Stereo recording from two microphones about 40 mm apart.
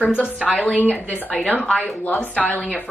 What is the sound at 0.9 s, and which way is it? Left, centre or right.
Speech, left.